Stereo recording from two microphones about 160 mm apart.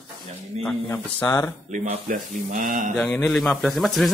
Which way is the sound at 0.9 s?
15° left (ahead or behind).